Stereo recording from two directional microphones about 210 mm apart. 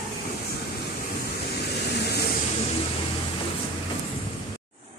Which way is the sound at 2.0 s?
50° left (ahead or behind).